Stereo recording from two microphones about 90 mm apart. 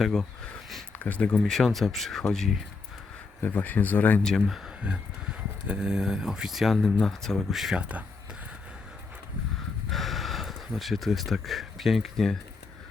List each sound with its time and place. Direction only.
0.0 s a sound: 5° left (ahead or behind)
0.9 s speech: 15° left (ahead or behind)
3.4 s speech: 20° left (ahead or behind)
4.2 s speech: 5° left (ahead or behind)
7.8 s speech: 15° right (ahead or behind)
9.9 s speech: centre (ahead or behind)